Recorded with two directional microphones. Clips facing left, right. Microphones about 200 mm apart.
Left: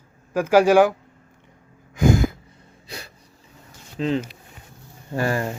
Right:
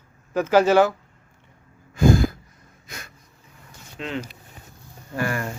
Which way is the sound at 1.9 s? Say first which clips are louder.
Right 1 dB; 15° left (ahead or behind).